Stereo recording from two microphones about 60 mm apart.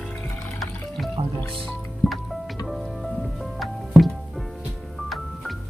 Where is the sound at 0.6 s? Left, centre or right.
Centre.